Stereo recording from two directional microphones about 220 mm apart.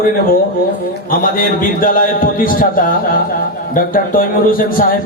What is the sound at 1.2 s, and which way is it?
A man's voice, 40° left (ahead or behind).